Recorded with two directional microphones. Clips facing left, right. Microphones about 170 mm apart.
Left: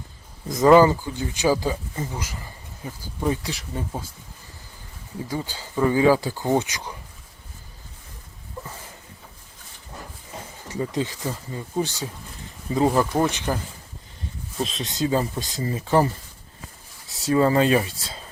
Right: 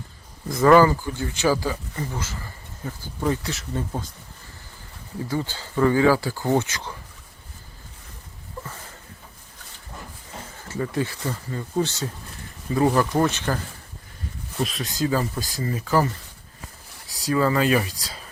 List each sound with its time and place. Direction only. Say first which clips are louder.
0.6 s speech: left 1 dB; 20° left (ahead or behind)
5.3 s speech: right 2 dB; 10° left (ahead or behind)
10.7 s speech: even; 15° left (ahead or behind)
14.6 s speech: even; 25° left (ahead or behind)
17.1 s speech: left 2 dB; 25° left (ahead or behind)